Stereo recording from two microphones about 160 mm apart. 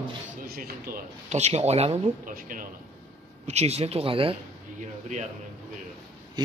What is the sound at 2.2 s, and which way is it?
Speech, 60° right (ahead or behind).